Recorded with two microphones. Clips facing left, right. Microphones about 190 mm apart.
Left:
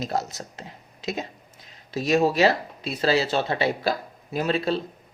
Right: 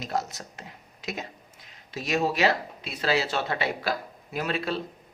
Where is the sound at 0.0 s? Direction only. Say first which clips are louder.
Left 3 dB; 30° left (ahead or behind).